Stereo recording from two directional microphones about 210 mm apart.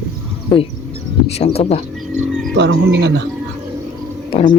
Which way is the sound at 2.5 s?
55° right (ahead or behind).